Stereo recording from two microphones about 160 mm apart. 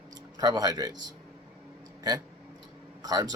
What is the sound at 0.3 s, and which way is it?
Speech, 25° right (ahead or behind).